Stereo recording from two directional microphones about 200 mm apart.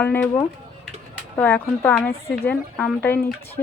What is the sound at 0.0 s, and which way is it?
Speech, 10° left (ahead or behind).